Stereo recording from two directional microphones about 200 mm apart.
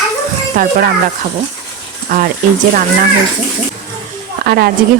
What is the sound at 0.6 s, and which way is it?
Speech, 45° right (ahead or behind).